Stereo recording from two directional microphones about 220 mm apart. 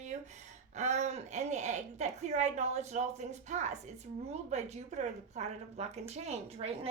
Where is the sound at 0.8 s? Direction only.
30° right (ahead or behind).